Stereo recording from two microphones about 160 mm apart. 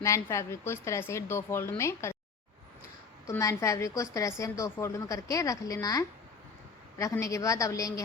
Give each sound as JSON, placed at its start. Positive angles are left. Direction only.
{"t": 0.0, "sound": "a woman's voice", "side_deg": 20}
{"t": 3.2, "sound": "a woman's voice", "side_deg": 20}